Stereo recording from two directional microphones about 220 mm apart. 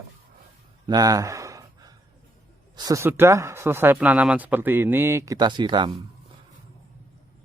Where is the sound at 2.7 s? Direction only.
15° right (ahead or behind).